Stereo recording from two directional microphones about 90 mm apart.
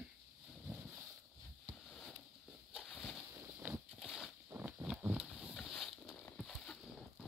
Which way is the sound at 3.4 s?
20° right (ahead or behind).